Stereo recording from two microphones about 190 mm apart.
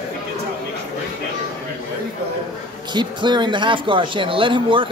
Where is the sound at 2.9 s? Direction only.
25° right (ahead or behind).